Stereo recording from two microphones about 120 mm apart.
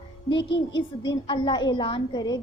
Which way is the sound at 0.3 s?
45° left (ahead or behind).